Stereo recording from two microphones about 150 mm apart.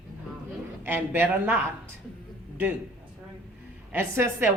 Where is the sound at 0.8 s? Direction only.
15° right (ahead or behind).